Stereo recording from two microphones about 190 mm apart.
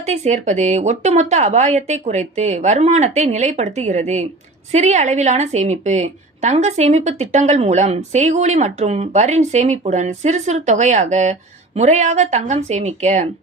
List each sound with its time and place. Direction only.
0.0 s a woman's voice: 35° right (ahead or behind)